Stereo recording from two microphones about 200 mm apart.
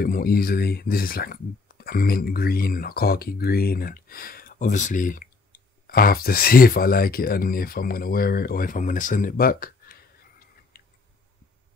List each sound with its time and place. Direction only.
0.0 s speech: 45° left (ahead or behind)
10.7 s chewing: 45° left (ahead or behind)